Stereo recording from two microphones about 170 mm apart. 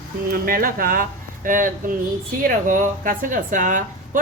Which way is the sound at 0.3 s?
60° right (ahead or behind).